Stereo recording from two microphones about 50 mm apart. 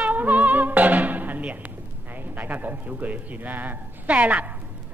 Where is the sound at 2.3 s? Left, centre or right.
Right.